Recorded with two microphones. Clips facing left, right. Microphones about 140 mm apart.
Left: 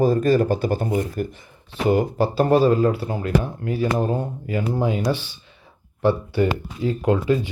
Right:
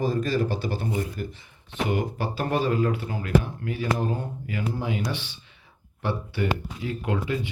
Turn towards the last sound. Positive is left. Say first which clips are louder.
# left 8 dB
turn(degrees=35)  # may be behind; listen again after turning